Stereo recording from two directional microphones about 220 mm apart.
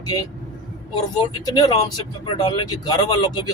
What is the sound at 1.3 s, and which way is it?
Speech, 15° left (ahead or behind).